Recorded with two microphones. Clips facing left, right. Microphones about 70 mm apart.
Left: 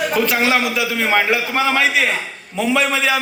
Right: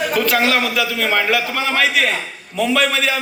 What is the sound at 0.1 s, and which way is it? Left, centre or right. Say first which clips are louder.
A man's voice: right 1 dB; left.